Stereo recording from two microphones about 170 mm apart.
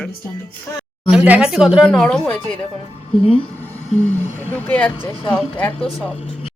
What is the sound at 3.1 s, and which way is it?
Speech, 35° left (ahead or behind).